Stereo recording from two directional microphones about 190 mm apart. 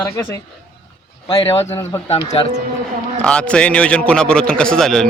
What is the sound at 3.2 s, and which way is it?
A man's voice, 5° left (ahead or behind).